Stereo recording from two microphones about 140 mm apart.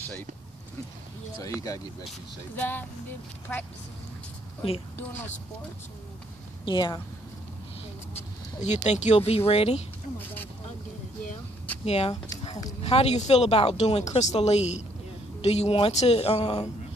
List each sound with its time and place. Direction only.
1.4 s speech: 25° left (ahead or behind)
2.5 s speech: 10° left (ahead or behind)
4.9 s speech: 15° left (ahead or behind)
6.6 s speech: 35° left (ahead or behind)
8.1 s speech: 50° left (ahead or behind)
10.1 s speech: 15° left (ahead or behind)
11.8 s speech: 45° left (ahead or behind)